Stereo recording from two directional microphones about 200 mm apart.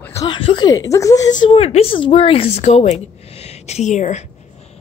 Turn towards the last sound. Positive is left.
turn(degrees=35)  # may be behind; listen again after turning